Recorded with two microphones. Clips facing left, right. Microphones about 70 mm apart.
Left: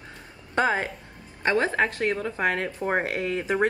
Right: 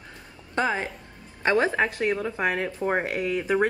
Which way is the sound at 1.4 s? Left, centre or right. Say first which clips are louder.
Right 1 dB; right.